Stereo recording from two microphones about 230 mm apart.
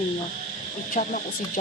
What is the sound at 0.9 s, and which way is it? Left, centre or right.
Speech, left.